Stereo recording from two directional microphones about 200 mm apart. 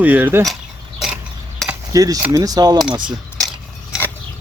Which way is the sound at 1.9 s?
15° right (ahead or behind).